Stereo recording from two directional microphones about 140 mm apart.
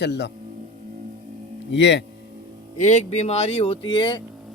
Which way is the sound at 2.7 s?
60° left (ahead or behind).